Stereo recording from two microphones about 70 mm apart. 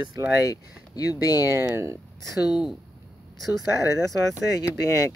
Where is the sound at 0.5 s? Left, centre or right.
Left.